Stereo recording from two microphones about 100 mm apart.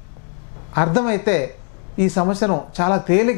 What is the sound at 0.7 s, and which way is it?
Speech, 15° left (ahead or behind).